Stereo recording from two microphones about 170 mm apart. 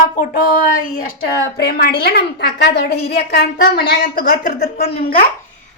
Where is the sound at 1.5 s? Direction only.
70° left (ahead or behind).